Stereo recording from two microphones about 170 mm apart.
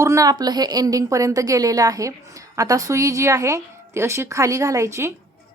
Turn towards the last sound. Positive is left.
turn(degrees=-15)  # may be behind; listen again after turning